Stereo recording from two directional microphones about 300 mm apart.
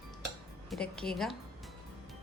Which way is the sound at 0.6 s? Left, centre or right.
Centre.